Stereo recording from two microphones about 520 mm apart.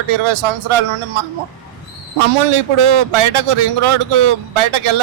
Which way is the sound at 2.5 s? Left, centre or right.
Right.